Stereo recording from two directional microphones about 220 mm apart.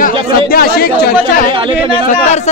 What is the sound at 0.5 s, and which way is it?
Speech, 45° left (ahead or behind).